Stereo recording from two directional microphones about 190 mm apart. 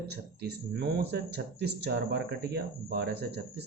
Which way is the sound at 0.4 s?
60° right (ahead or behind).